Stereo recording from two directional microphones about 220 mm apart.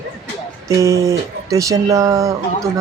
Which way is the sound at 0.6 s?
15° right (ahead or behind).